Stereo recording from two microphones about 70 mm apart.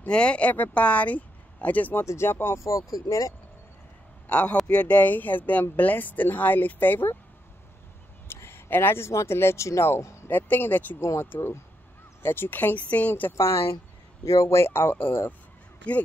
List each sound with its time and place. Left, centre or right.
0.0 s speech: centre
2.0 s speech: left
4.3 s speech: centre
8.3 s speech: left
10.3 s speech: left
11.0 s speech: left
13.4 s speech: left
15.8 s speech: centre